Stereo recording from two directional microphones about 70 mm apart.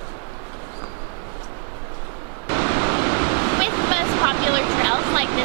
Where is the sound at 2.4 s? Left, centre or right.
Right.